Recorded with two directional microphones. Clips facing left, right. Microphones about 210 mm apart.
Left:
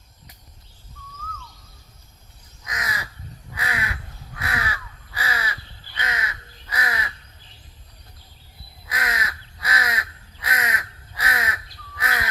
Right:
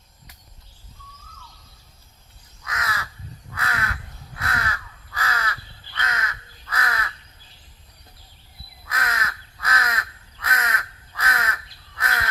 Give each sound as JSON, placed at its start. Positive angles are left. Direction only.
{"t": 2.6, "sound": "crow", "side_deg": 15}
{"t": 8.9, "sound": "crow", "side_deg": 15}